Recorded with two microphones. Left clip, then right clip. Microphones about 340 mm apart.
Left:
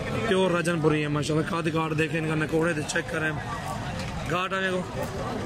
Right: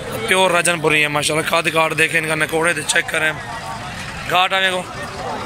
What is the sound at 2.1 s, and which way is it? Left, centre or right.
Speech, right.